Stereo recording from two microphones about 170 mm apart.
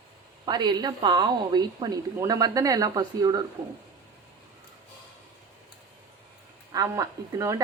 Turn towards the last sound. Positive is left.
turn(degrees=-20)  # may be behind; listen again after turning